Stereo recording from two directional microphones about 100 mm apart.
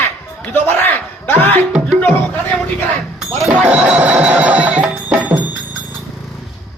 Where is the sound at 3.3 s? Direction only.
Centre (ahead or behind).